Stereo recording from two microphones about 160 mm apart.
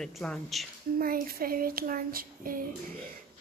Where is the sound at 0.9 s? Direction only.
60° right (ahead or behind).